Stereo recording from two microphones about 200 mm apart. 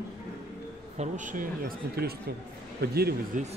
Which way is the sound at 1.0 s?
40° right (ahead or behind).